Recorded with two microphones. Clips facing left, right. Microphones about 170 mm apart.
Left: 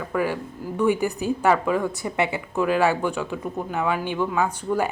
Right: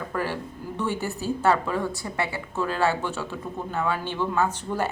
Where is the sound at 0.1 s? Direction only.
10° left (ahead or behind).